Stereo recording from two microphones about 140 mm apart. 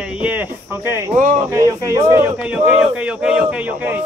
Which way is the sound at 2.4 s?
10° right (ahead or behind).